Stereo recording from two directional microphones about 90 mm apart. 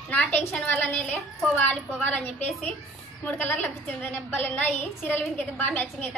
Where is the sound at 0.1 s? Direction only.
15° left (ahead or behind).